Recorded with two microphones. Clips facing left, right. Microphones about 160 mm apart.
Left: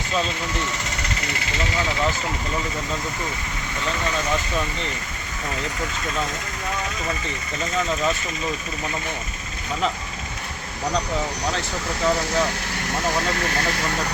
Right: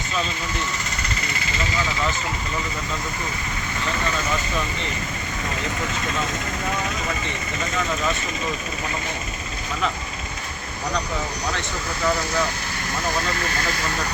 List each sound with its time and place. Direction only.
0.9 s vehicle: 75° left (ahead or behind)
12.0 s speech: 35° left (ahead or behind)
13.3 s speech: 70° left (ahead or behind)